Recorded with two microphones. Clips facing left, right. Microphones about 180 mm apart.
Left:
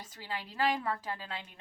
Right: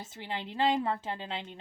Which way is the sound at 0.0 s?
25° right (ahead or behind).